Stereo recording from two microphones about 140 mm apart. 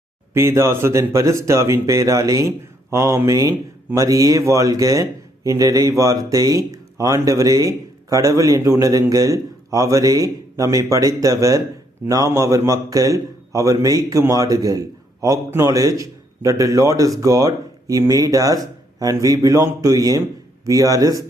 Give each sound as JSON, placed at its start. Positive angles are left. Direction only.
{"t": 0.3, "sound": "a man's voice", "side_deg": -20}